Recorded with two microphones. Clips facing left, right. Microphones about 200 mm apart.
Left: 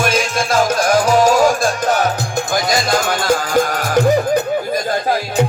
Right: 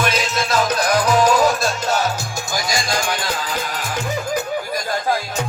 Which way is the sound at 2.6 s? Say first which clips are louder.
Left 3 dB; 55° left (ahead or behind).